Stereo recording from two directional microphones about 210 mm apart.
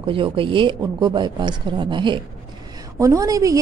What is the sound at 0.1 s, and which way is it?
A woman's voice, 25° right (ahead or behind).